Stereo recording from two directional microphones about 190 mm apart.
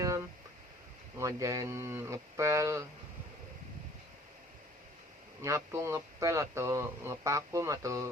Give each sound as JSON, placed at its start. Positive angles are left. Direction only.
{"t": 1.2, "sound": "speech", "side_deg": -15}
{"t": 5.4, "sound": "speech", "side_deg": -15}